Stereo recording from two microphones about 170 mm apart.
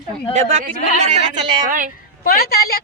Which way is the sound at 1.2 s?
30° right (ahead or behind).